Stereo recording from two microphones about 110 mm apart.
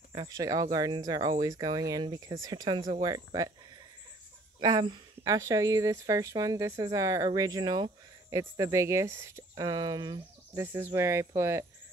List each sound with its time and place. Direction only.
0.1 s speech: 40° right (ahead or behind)
4.6 s speech: 40° right (ahead or behind)
9.7 s speech: 40° right (ahead or behind)
10.6 s speech: 20° right (ahead or behind)